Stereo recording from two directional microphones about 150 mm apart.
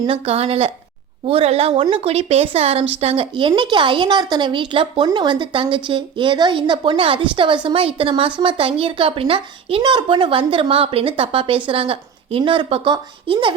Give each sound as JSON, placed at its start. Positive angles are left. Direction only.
{"t": 0.1, "sound": "a woman's voice", "side_deg": -40}